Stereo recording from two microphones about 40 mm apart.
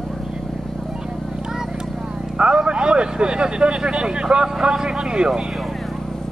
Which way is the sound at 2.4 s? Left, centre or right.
Centre.